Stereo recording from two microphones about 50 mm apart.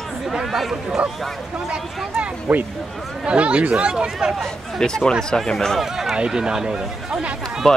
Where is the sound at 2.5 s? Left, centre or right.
Right.